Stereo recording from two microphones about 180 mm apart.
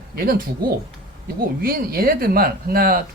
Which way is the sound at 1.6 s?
55° right (ahead or behind).